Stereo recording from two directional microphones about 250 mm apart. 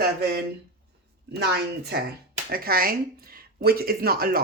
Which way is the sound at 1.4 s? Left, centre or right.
Right.